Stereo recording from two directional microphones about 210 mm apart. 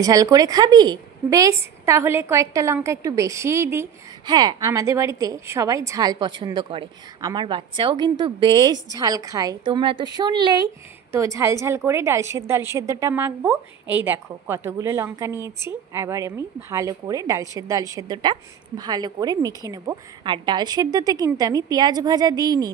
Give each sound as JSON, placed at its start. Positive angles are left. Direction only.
{"t": 0.0, "sound": "a woman's voice", "side_deg": -15}